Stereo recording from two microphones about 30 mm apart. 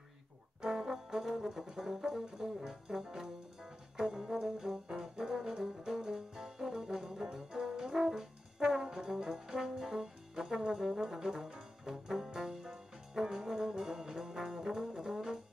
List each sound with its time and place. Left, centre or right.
0.6 s brass instrument: right
11.8 s trombone: centre
15.0 s brass instrument: centre